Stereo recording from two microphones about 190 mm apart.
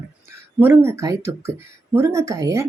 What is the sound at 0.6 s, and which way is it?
Speech, 10° right (ahead or behind).